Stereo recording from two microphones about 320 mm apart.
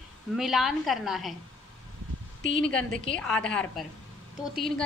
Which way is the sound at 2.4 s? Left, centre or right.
Left.